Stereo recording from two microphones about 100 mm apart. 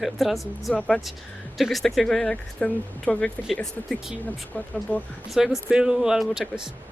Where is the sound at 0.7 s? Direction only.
15° left (ahead or behind).